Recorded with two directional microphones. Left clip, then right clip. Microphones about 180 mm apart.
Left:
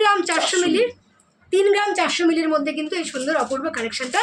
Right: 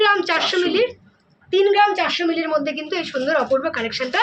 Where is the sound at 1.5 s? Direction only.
20° left (ahead or behind).